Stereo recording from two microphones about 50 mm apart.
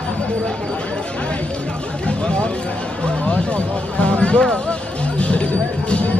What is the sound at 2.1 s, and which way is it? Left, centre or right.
Speech, left.